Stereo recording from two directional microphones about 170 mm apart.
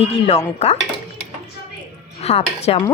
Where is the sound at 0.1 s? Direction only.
40° left (ahead or behind).